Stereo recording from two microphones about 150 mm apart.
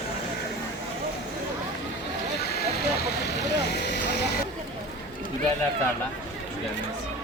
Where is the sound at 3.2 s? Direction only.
90° left.